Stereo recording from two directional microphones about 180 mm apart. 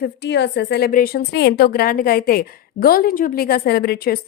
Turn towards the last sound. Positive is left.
turn(degrees=60)  # may be behind; listen again after turning